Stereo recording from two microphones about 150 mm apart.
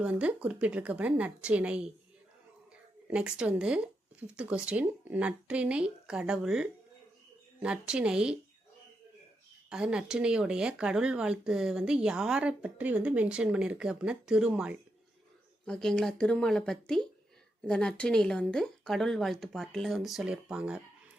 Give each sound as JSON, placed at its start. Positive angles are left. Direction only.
{"t": 0.0, "sound": "speech", "side_deg": -10}
{"t": 3.1, "sound": "speech", "side_deg": -5}
{"t": 9.6, "sound": "speech", "side_deg": -5}
{"t": 15.6, "sound": "speech", "side_deg": 5}